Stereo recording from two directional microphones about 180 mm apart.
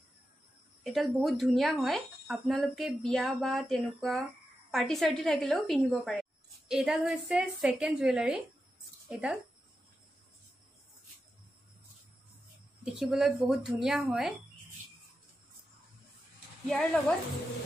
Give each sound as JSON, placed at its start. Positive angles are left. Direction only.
{"t": 0.8, "sound": "speech", "side_deg": 0}
{"t": 12.8, "sound": "speech", "side_deg": 0}
{"t": 16.6, "sound": "speech", "side_deg": 5}